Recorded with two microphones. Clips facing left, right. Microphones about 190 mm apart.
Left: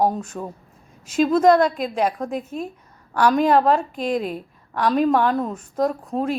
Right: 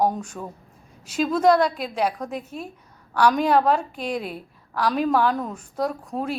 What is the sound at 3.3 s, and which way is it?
A woman's voice, centre (ahead or behind).